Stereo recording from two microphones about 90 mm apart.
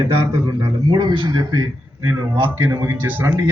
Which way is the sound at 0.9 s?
60° right (ahead or behind).